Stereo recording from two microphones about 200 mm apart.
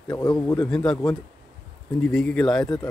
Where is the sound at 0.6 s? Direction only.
5° left (ahead or behind).